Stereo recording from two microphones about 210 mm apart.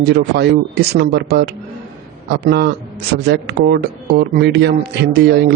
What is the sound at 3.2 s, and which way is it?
A man's voice, 50° right (ahead or behind).